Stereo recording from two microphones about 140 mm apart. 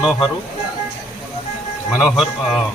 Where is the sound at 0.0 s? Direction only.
5° right (ahead or behind).